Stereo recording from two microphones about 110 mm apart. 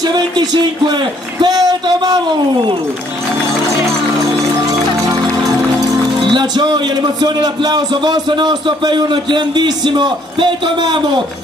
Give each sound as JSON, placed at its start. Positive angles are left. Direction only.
{"t": 0.0, "sound": "a man's voice", "side_deg": -40}
{"t": 6.1, "sound": "a man's voice", "side_deg": -45}